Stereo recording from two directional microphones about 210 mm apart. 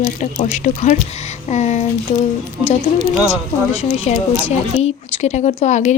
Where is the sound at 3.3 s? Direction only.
30° left (ahead or behind).